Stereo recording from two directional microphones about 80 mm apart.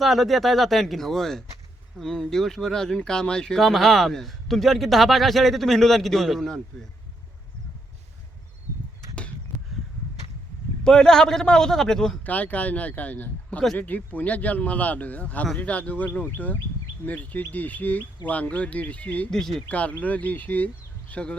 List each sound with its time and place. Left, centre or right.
0.0 s speech: centre
10.8 s a man's voice: centre
12.2 s a man's voice: centre
19.3 s speech: centre
19.6 s speech: centre